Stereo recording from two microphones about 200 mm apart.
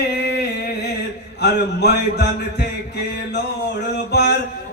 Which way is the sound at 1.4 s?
55° left (ahead or behind).